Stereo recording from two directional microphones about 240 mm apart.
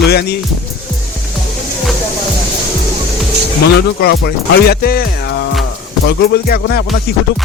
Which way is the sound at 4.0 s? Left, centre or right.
Left.